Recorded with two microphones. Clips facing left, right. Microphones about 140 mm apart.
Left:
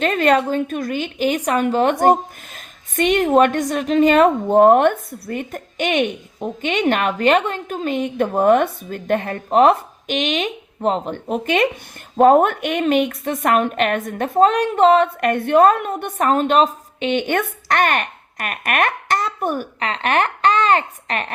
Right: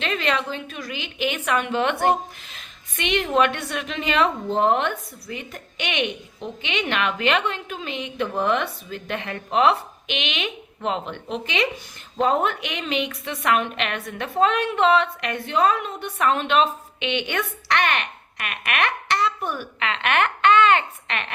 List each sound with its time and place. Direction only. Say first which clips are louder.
0.0 s a woman's voice: left 9 dB; 45° left (ahead or behind)